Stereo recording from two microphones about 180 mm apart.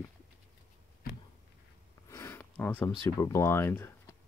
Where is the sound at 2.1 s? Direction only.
15° left (ahead or behind).